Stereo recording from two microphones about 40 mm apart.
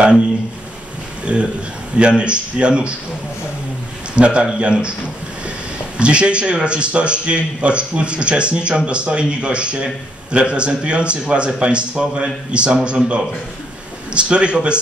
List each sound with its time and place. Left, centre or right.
1.2 s a man's voice: right
4.1 s a man's voice: right
5.9 s a man's voice: right